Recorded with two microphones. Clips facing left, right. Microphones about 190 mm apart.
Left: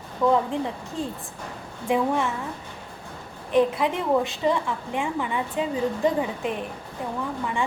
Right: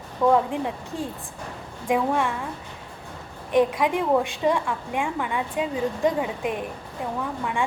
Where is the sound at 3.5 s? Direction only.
10° right (ahead or behind).